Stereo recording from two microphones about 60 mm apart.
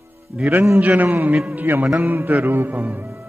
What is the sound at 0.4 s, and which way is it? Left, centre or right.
Speech, centre.